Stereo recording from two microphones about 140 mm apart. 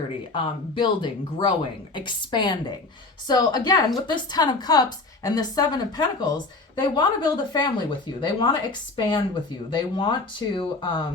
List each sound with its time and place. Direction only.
0.3 s a woman's voice: 35° left (ahead or behind)